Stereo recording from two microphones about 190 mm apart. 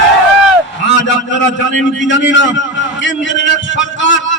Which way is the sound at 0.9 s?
75° left (ahead or behind).